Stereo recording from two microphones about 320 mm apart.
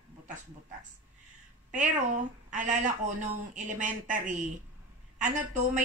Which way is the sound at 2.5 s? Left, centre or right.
Right.